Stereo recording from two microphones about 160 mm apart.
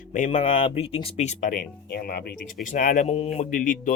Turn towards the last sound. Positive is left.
turn(degrees=55)  # may be behind; listen again after turning